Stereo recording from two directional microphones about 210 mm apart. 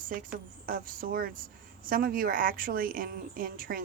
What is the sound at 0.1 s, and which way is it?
Speech, 40° right (ahead or behind).